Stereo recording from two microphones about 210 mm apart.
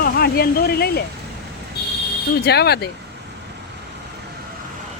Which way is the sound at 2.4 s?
50° left (ahead or behind).